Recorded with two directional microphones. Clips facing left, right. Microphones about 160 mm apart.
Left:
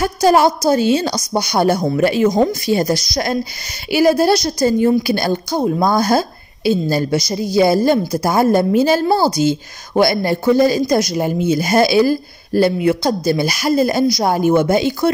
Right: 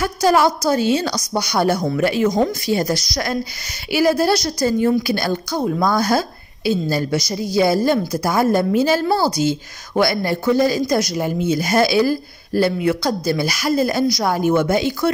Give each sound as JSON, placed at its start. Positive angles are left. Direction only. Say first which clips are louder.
{"t": 0.0, "sound": "a woman's voice", "louder": "left 3 dB", "side_deg": 25}